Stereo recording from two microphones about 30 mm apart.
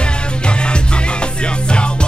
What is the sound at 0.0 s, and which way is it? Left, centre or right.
Music, left.